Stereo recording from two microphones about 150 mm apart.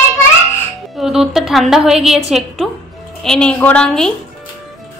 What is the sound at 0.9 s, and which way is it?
A woman's voice, centre (ahead or behind).